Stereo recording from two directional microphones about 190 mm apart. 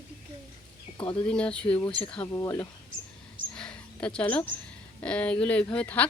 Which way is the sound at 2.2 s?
15° left (ahead or behind).